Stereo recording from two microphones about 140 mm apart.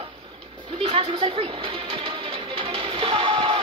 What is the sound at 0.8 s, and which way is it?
Music, 40° right (ahead or behind).